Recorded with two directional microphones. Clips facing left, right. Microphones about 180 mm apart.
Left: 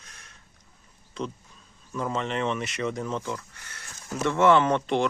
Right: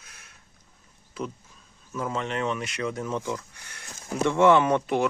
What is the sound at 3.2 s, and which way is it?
Sheep, 15° right (ahead or behind).